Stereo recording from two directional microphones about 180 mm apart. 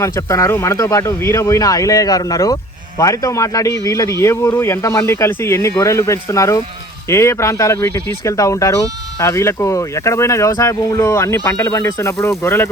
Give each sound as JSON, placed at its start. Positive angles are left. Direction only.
{"t": 0.0, "sound": "speech", "side_deg": 15}